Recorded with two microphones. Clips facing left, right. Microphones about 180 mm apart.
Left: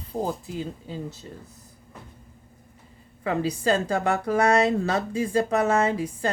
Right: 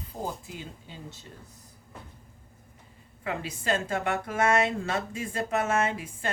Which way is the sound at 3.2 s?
35° left (ahead or behind).